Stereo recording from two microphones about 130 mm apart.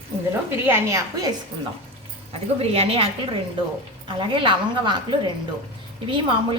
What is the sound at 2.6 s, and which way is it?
A woman's voice, 50° right (ahead or behind).